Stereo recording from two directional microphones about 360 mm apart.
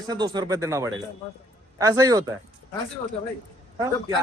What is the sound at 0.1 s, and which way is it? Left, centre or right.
A man's voice, centre.